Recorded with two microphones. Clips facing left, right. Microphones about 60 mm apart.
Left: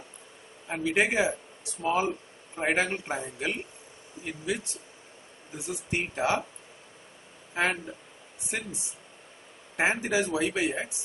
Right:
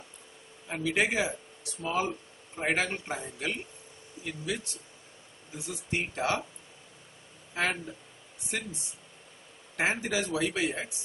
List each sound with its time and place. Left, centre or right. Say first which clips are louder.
0.7 s speech: left 2 dB; centre
5.7 s speech: left 2 dB; centre
7.5 s speech: left 3 dB; centre
9.8 s speech: left 3 dB; centre